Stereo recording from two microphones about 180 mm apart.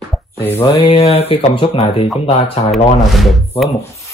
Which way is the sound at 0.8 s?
30° left (ahead or behind).